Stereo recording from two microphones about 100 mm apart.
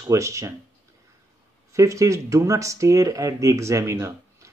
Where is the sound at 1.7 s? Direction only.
30° right (ahead or behind).